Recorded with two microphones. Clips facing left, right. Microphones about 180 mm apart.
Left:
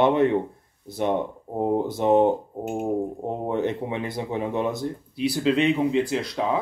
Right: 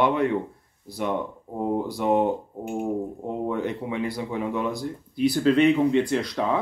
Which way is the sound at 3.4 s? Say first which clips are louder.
Left 3 dB; 25° left (ahead or behind).